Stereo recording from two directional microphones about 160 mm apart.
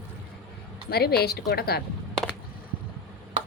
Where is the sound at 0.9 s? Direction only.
80° left.